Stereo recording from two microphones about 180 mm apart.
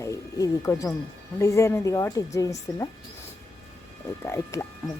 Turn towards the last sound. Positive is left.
turn(degrees=15)  # may be behind; listen again after turning